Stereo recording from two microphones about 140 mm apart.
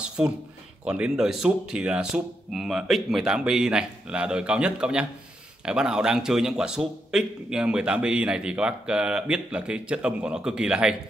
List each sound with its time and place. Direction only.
0.2 s a man's voice: 10° right (ahead or behind)